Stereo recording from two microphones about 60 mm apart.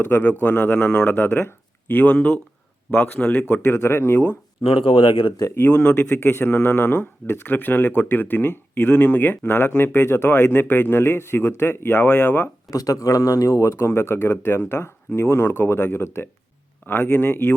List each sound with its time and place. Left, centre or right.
0.0 s speech: left
1.1 s speech: left
3.6 s speech: left
5.7 s speech: left
6.1 s speech: left
12.0 s speech: left
12.7 s speech: left